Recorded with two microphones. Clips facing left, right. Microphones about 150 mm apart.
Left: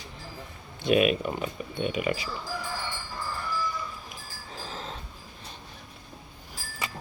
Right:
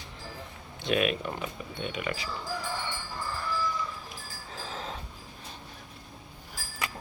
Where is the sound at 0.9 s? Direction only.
15° left (ahead or behind).